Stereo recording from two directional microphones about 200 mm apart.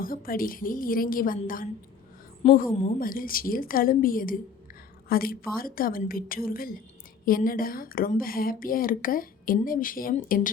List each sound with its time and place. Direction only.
0.0 s a woman's voice: 45° left (ahead or behind)
2.4 s a woman's voice: 30° left (ahead or behind)
3.0 s a woman's voice: 45° left (ahead or behind)